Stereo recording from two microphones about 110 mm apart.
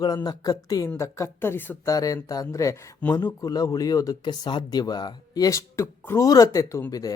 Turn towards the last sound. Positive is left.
turn(degrees=35)  # may be behind; listen again after turning